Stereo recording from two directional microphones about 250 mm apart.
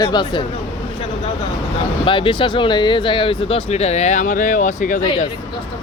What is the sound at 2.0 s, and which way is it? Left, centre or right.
Speech, centre.